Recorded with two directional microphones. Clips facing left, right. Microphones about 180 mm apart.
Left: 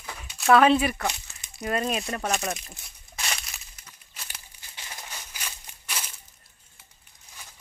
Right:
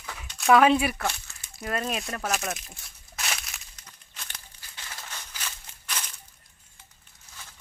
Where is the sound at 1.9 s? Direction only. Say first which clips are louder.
Left 2 dB; centre (ahead or behind).